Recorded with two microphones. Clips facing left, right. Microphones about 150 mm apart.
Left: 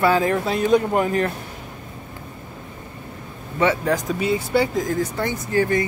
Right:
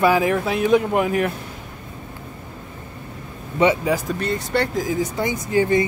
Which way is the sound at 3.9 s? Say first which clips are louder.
Left 2 dB; centre (ahead or behind).